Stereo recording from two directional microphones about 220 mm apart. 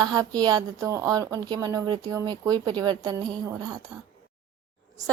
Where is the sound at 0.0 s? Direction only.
20° right (ahead or behind).